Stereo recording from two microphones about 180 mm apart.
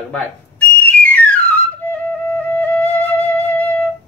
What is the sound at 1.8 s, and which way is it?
Flute, 10° left (ahead or behind).